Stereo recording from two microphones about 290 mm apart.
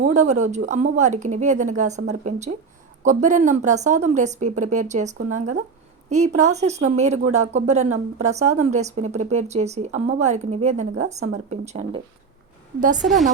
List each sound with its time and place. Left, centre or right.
0.0 s speech: right
13.1 s speech: centre